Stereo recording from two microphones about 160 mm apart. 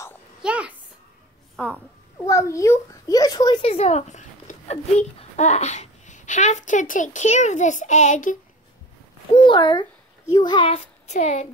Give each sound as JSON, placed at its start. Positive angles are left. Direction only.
{"t": 0.4, "sound": "a sound", "side_deg": -5}
{"t": 1.6, "sound": "a sound", "side_deg": 10}
{"t": 2.2, "sound": "a child's voice", "side_deg": 20}
{"t": 3.6, "sound": "a child's voice", "side_deg": 40}
{"t": 9.3, "sound": "a child's voice", "side_deg": 30}
{"t": 11.1, "sound": "a child's voice", "side_deg": 45}